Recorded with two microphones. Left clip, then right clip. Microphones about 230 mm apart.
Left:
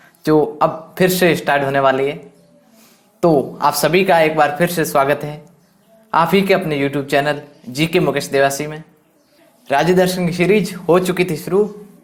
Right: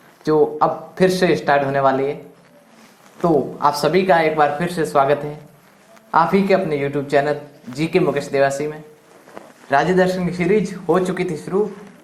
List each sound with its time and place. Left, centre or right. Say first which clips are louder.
0.2 s a man's voice: left 2 dB; left
3.2 s a man's voice: left 3 dB; left